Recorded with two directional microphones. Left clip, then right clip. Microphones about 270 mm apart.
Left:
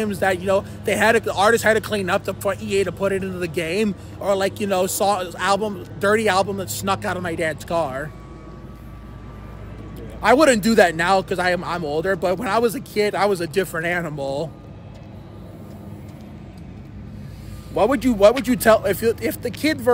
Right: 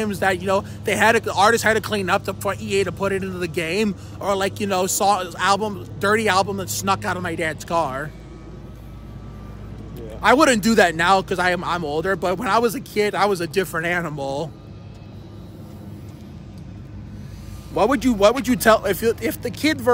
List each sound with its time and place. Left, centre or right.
0.0 s speech: centre
10.2 s speech: centre
17.7 s speech: centre